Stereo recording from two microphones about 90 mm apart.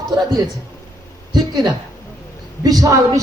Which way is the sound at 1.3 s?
45° right (ahead or behind).